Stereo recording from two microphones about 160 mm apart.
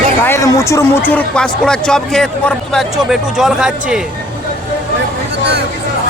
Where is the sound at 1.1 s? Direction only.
5° left (ahead or behind).